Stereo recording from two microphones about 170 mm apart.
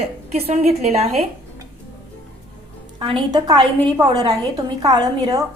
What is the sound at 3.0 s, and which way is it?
A woman's voice, 25° right (ahead or behind).